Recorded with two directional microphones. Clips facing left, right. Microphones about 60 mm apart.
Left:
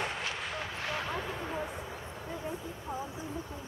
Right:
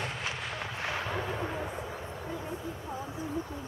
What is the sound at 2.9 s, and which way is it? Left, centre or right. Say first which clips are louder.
Speech: left 2 dB; centre.